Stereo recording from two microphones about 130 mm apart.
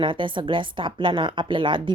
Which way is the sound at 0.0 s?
40° right (ahead or behind).